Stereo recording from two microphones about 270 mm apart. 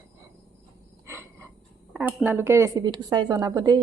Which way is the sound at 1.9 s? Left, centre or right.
Centre.